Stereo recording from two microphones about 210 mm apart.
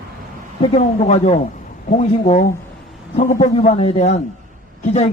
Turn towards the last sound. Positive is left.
turn(degrees=30)  # may be behind; listen again after turning